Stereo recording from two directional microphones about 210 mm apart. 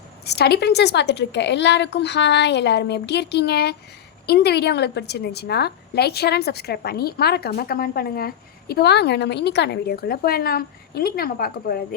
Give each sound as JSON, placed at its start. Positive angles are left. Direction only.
{"t": 0.3, "sound": "a woman's voice", "side_deg": 50}